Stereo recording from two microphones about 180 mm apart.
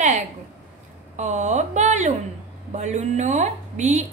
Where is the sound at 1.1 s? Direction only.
40° right (ahead or behind).